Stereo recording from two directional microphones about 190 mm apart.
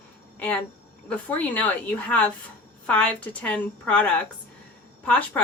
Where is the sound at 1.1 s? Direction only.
10° left (ahead or behind).